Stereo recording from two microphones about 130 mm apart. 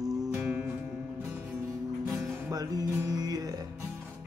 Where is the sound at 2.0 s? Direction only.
5° right (ahead or behind).